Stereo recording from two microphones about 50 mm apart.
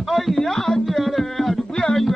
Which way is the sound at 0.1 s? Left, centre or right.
Centre.